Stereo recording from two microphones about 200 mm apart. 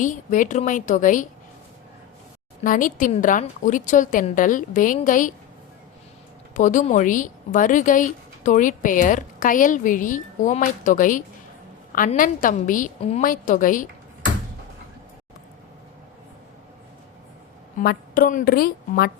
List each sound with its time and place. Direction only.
0.0 s speech: 40° left (ahead or behind)
2.6 s speech: 40° left (ahead or behind)
6.5 s speech: 40° left (ahead or behind)
17.7 s a woman's voice: 50° left (ahead or behind)